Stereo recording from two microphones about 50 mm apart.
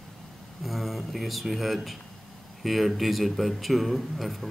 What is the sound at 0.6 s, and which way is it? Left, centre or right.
A man's voice, centre.